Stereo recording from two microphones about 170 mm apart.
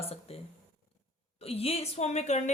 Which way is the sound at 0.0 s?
35° left (ahead or behind).